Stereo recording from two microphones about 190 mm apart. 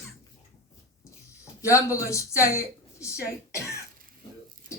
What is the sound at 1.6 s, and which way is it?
A man's voice, 15° left (ahead or behind).